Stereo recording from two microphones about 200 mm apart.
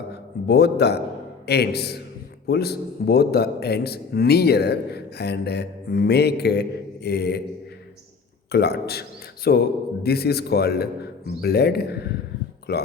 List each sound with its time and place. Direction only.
0.4 s a man's voice: 55° left (ahead or behind)
8.5 s a man's voice: 55° left (ahead or behind)